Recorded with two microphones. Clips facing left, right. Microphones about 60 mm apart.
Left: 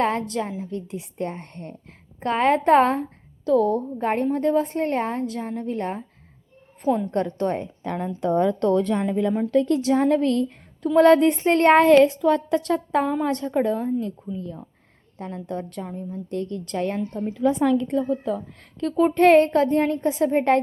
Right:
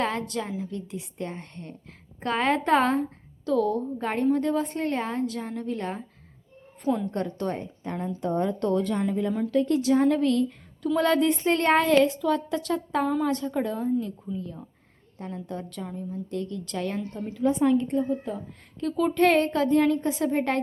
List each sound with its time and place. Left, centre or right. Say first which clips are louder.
0.0 s a woman's voice: left 5 dB; left
2.2 s a woman's voice: left 5 dB; left
2.6 s a woman's voice: left 5 dB; left
7.1 s speech: left 5 dB; left
7.3 s a woman's voice: left 5 dB; left
7.6 s speech: left 4 dB; left
8.9 s a woman's voice: left 4 dB; left
17.4 s a woman's voice: left 2 dB; left
18.9 s a woman's voice: left 6 dB; left